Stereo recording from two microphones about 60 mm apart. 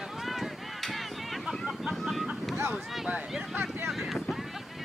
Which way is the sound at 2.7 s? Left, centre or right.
Centre.